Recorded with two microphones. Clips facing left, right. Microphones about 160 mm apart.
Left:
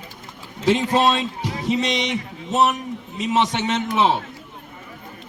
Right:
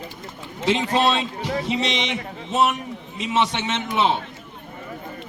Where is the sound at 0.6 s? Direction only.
40° left (ahead or behind).